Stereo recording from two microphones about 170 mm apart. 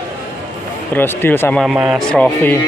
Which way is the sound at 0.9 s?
10° left (ahead or behind).